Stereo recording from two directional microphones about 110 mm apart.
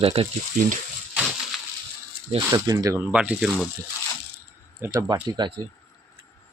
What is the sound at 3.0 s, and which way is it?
Speech, 10° right (ahead or behind).